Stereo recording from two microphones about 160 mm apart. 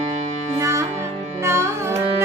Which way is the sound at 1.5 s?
15° right (ahead or behind).